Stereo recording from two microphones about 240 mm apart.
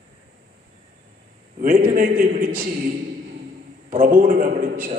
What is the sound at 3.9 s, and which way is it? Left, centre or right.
A man's voice, right.